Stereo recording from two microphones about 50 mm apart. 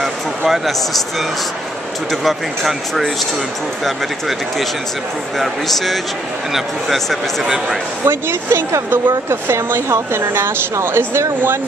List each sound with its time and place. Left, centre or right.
0.5 s speech: centre
2.0 s speech: centre
7.4 s a man's voice: centre
8.0 s speech: right